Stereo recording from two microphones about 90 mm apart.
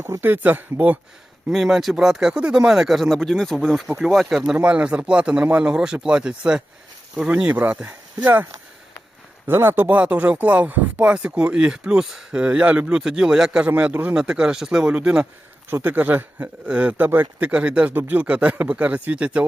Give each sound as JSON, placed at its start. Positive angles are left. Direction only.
{"t": 0.0, "sound": "speech", "side_deg": -25}
{"t": 1.5, "sound": "speech", "side_deg": -5}
{"t": 4.5, "sound": "speech", "side_deg": -15}
{"t": 9.5, "sound": "speech", "side_deg": -25}
{"t": 15.7, "sound": "speech", "side_deg": -20}